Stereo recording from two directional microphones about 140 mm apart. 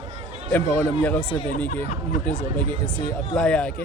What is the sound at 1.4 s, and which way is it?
Speech, 65° left (ahead or behind).